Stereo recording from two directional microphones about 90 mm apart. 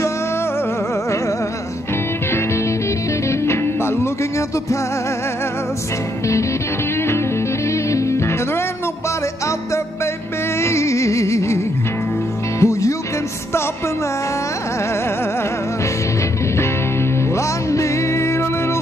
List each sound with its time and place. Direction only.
3.3 s music: 30° left (ahead or behind)
7.9 s music: 35° left (ahead or behind)
10.6 s music: 30° left (ahead or behind)
17.4 s music: 35° left (ahead or behind)